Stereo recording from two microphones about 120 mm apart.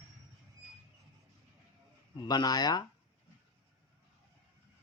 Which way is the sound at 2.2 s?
35° left (ahead or behind).